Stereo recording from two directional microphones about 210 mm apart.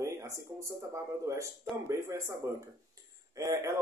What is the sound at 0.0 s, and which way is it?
A man's voice, 15° right (ahead or behind).